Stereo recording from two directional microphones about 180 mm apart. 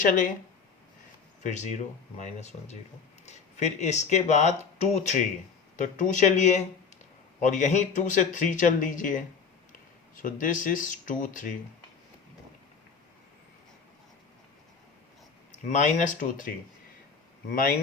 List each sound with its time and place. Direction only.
0.0 s speech: 45° left (ahead or behind)
1.5 s speech: 40° left (ahead or behind)
15.6 s speech: 45° left (ahead or behind)